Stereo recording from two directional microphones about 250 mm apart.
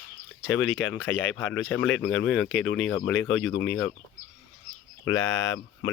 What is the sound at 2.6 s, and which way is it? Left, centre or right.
Speech, left.